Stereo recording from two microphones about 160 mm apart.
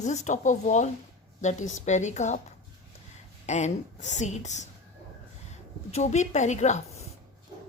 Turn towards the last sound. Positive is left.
turn(degrees=45)  # may be behind; listen again after turning